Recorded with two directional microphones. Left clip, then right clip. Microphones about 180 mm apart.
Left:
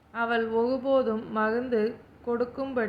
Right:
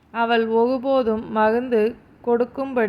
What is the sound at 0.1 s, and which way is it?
A woman's voice, 35° right (ahead or behind).